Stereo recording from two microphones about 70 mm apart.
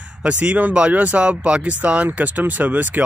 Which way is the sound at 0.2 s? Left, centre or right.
Centre.